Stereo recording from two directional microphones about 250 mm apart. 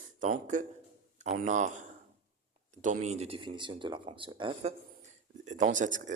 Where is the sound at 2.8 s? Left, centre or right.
Right.